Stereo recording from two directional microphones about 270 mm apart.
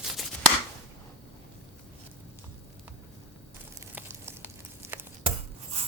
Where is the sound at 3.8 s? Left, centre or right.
Centre.